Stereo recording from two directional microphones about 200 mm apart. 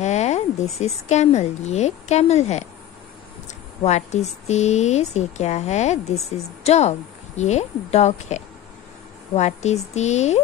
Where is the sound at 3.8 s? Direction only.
35° left (ahead or behind).